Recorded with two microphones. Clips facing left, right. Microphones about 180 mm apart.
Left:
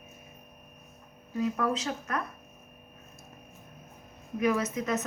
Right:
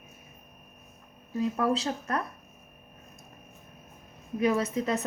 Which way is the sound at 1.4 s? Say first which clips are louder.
Right 2 dB; 30° right (ahead or behind).